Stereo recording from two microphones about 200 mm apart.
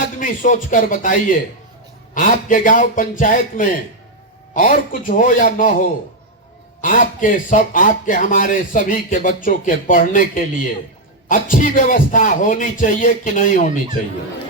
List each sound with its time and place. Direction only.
0.2 s speech: 40° left (ahead or behind)